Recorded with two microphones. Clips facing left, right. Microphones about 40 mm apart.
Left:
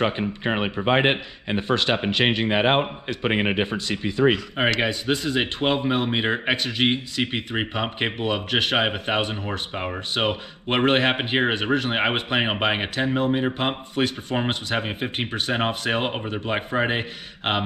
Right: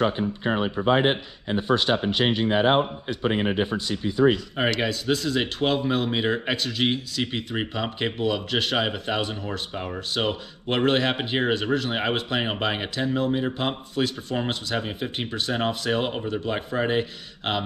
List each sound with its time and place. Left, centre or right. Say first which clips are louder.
0.0 s speech: even; left
4.6 s speech: left 2 dB; left